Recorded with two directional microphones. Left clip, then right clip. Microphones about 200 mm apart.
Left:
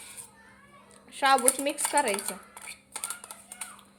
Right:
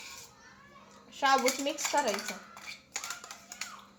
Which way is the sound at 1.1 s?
30° left (ahead or behind).